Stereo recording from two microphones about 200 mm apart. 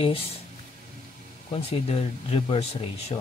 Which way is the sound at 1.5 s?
30° left (ahead or behind).